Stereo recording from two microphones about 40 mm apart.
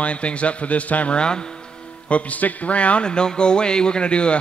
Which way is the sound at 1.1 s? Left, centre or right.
Left.